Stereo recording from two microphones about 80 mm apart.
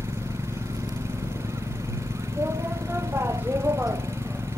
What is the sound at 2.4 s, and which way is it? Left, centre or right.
Vehicle, right.